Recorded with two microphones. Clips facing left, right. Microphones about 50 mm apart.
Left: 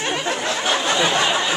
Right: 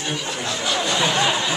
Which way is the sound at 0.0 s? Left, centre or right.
Left.